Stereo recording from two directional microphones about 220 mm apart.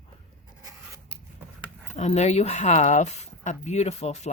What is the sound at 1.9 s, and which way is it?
Speech, 30° left (ahead or behind).